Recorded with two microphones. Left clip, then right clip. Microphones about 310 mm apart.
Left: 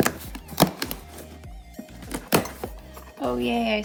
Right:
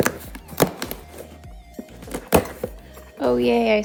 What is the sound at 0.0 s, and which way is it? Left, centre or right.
Chop, centre.